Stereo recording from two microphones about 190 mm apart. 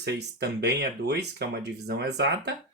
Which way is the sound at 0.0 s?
60° right (ahead or behind).